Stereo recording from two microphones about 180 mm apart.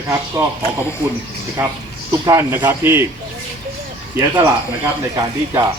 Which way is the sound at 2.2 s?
15° right (ahead or behind).